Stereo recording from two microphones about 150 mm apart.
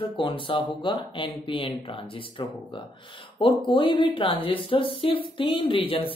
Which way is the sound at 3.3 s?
35° left (ahead or behind).